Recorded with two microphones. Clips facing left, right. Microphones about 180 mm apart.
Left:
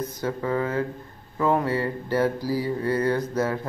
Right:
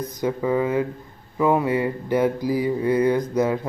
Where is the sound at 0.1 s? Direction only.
15° right (ahead or behind).